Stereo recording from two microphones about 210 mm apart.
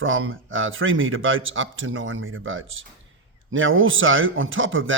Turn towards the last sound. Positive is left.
turn(degrees=-65)  # may be behind; listen again after turning